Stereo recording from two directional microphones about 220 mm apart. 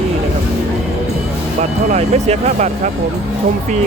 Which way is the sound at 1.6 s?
30° right (ahead or behind).